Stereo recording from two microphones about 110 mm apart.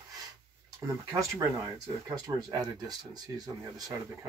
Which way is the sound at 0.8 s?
25° right (ahead or behind).